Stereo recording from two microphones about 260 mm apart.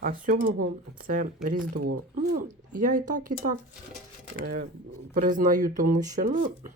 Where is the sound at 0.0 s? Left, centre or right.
Right.